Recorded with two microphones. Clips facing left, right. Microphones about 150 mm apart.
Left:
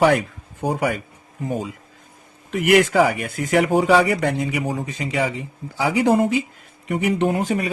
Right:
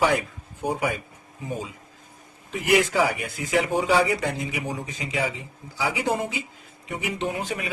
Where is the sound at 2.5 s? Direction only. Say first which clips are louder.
Left 5 dB; 70° left (ahead or behind).